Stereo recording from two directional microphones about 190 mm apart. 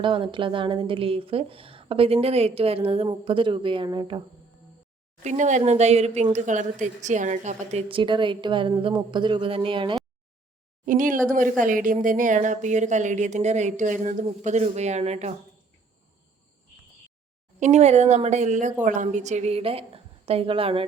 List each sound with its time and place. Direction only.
0.0 s a woman's voice: 25° right (ahead or behind)
5.2 s a woman's voice: 40° right (ahead or behind)
10.8 s speech: 45° right (ahead or behind)
17.6 s speech: 35° right (ahead or behind)